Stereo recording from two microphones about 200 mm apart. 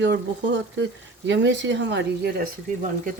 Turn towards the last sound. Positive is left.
turn(degrees=-40)  # may be behind; listen again after turning